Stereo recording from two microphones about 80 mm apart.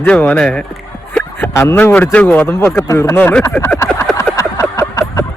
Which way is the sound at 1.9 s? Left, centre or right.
Centre.